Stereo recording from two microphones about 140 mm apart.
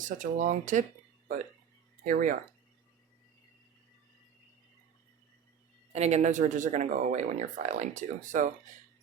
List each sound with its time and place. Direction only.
0.0 s speech: 65° right (ahead or behind)
2.0 s speech: 70° right (ahead or behind)
5.9 s speech: 50° right (ahead or behind)